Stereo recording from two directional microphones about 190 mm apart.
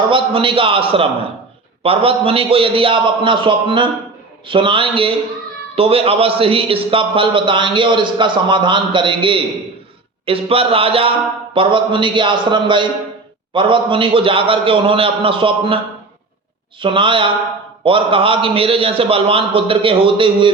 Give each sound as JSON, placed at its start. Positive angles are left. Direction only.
{"t": 0.1, "sound": "speech", "side_deg": -25}
{"t": 16.8, "sound": "speech", "side_deg": -25}